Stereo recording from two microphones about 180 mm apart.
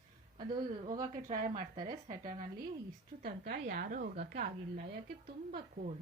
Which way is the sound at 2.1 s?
45° right (ahead or behind).